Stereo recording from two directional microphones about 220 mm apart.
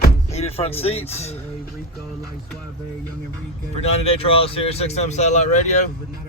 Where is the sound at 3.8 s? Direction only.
25° left (ahead or behind).